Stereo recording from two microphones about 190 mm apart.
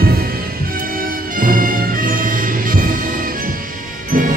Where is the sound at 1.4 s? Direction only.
45° right (ahead or behind).